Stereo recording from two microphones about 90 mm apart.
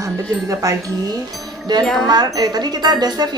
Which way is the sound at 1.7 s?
50° right (ahead or behind).